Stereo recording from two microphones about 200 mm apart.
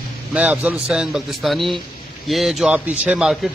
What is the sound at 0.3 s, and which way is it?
A man's voice, 5° right (ahead or behind).